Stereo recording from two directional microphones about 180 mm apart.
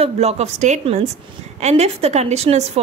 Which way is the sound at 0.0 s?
35° right (ahead or behind).